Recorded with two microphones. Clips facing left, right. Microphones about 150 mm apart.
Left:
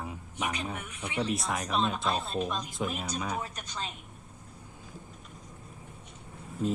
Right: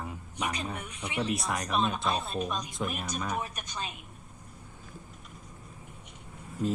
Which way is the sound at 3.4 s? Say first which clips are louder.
Right 1 dB; 15° right (ahead or behind).